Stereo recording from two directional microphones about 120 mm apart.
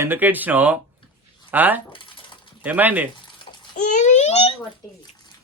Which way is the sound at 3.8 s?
90° left.